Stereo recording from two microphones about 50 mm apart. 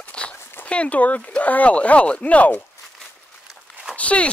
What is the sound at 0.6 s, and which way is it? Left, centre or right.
Speech, left.